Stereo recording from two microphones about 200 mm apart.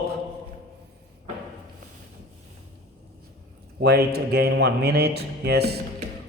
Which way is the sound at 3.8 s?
55° right (ahead or behind).